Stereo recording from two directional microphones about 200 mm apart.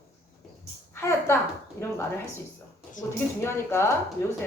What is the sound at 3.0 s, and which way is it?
Speech, 10° left (ahead or behind).